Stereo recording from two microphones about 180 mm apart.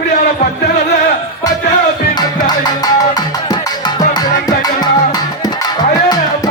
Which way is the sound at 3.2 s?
25° left (ahead or behind).